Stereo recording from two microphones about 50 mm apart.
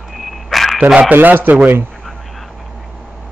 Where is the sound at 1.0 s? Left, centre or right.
Right.